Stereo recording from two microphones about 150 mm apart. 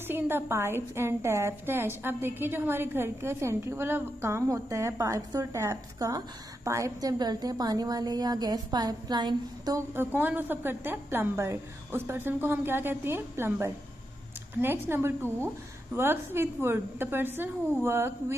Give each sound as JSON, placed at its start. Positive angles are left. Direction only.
{"t": 0.1, "sound": "a woman's voice", "side_deg": -15}